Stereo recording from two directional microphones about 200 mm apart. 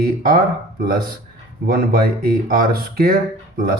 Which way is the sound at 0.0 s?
45° right (ahead or behind).